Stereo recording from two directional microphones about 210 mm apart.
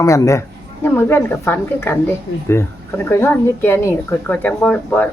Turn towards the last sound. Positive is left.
turn(degrees=5)  # may be behind; listen again after turning